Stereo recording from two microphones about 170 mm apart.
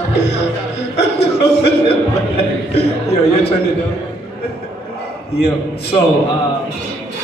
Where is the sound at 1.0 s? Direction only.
75° left (ahead or behind).